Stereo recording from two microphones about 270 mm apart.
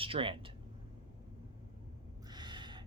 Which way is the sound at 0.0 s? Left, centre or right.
Centre.